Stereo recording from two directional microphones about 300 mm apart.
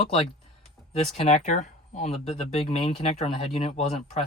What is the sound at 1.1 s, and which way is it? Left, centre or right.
Speech, left.